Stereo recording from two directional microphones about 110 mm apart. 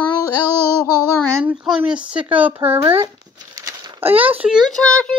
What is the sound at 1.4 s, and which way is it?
Speech, 10° right (ahead or behind).